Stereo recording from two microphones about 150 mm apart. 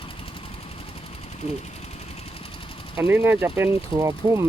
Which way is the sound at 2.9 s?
15° right (ahead or behind).